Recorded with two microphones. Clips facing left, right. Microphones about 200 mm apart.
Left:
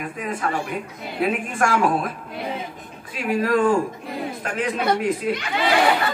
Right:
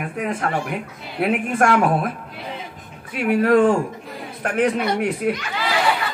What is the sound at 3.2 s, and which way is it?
A man's voice, 60° right (ahead or behind).